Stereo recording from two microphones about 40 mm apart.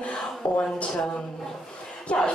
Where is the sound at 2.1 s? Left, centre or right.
Left.